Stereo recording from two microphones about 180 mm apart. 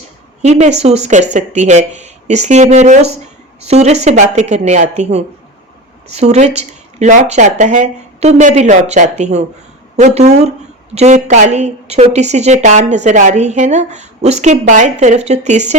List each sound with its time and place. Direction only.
0.4 s speech: 40° right (ahead or behind)